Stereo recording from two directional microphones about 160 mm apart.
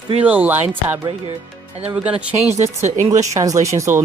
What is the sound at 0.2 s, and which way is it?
Speech, 10° right (ahead or behind).